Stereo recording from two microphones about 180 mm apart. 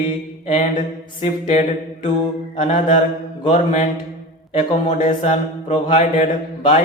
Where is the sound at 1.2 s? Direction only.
35° left (ahead or behind).